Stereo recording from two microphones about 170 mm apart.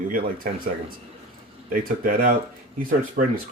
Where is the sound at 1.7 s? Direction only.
55° right (ahead or behind).